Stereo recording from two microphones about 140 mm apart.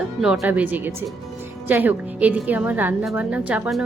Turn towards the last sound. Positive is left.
turn(degrees=-10)  # may be behind; listen again after turning